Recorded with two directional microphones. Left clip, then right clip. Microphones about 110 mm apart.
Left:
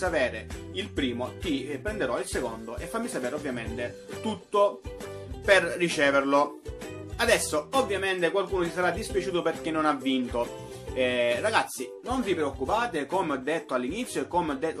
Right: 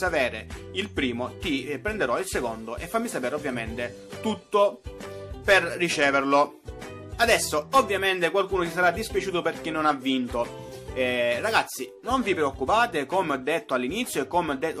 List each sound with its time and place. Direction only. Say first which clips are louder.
0.0 s speech: right 2 dB; 35° right (ahead or behind)
5.4 s speech: right 1 dB; 25° right (ahead or behind)
7.7 s speech: right 6 dB; 40° right (ahead or behind); by 11.6 s 20° right (ahead or behind)
12.1 s speech: right 4 dB; 45° right (ahead or behind)